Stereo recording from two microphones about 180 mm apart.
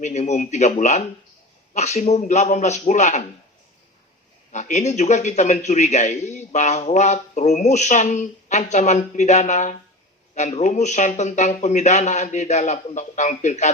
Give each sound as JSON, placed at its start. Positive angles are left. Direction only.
{"t": 0.0, "sound": "a man's voice", "side_deg": 40}
{"t": 4.5, "sound": "a man's voice", "side_deg": 40}